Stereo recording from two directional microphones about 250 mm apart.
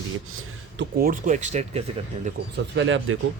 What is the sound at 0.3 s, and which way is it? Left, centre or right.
Speech, right.